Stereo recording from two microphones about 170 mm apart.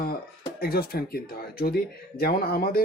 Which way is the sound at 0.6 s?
65° left (ahead or behind).